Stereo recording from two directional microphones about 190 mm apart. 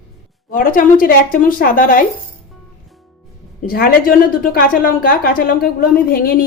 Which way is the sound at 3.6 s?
50° left (ahead or behind).